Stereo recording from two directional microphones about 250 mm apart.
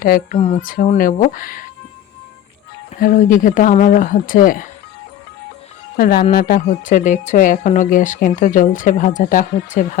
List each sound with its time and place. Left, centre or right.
0.0 s speech: left
3.0 s speech: left
6.0 s speech: left